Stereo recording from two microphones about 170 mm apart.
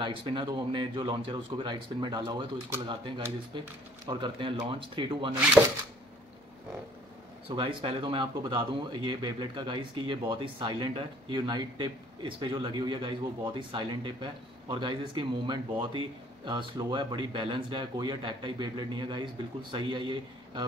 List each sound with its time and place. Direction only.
0.0 s speech: 30° right (ahead or behind)
7.4 s speech: 30° right (ahead or behind)